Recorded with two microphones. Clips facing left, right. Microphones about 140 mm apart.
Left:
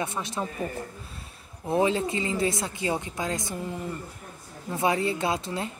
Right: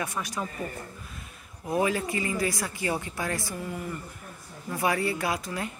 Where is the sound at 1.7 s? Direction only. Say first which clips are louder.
Left 2 dB; 25° left (ahead or behind).